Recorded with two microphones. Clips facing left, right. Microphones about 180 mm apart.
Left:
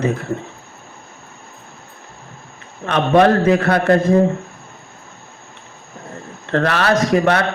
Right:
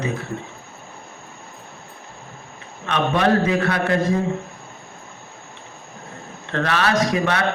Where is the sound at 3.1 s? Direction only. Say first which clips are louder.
Left 7 dB; 50° left (ahead or behind).